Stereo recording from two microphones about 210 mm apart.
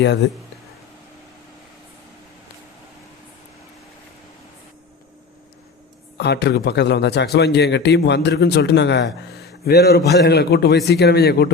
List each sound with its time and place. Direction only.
6.1 s a man's voice: 50° left (ahead or behind)